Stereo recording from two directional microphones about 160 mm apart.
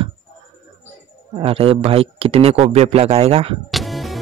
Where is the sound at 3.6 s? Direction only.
Centre (ahead or behind).